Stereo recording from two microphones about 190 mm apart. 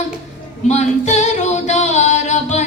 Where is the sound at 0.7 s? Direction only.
35° left (ahead or behind).